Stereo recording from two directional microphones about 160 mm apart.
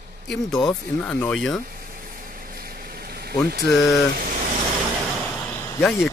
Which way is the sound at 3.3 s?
75° right (ahead or behind).